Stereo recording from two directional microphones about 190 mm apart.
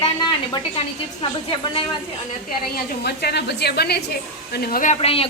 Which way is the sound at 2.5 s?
50° left (ahead or behind).